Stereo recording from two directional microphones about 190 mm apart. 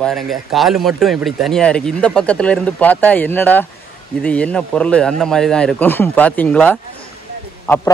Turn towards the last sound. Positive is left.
turn(degrees=10)  # may be behind; listen again after turning